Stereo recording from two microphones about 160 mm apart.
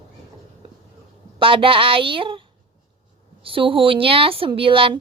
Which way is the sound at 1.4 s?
35° right (ahead or behind).